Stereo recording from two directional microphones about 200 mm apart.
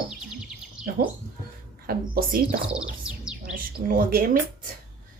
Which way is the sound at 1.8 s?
45° right (ahead or behind).